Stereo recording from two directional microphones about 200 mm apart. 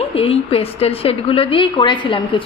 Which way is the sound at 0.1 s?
30° left (ahead or behind).